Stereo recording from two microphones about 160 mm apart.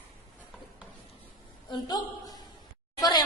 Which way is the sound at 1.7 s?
25° left (ahead or behind).